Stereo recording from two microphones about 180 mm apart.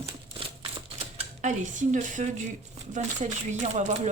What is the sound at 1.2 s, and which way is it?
Speech, 40° right (ahead or behind).